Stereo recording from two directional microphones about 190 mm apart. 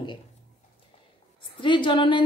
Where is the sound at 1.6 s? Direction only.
25° left (ahead or behind).